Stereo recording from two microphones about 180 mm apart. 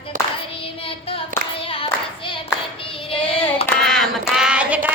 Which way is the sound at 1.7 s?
30° left (ahead or behind).